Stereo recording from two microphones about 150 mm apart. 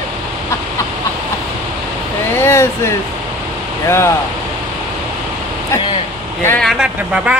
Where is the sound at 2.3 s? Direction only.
15° left (ahead or behind).